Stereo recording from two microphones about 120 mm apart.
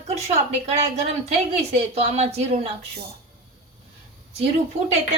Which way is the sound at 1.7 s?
60° right (ahead or behind).